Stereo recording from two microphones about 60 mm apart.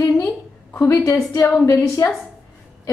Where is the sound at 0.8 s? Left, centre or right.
Left.